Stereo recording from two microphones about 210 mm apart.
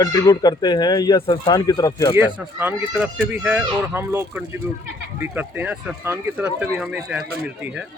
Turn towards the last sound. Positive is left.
turn(degrees=-5)  # may be behind; listen again after turning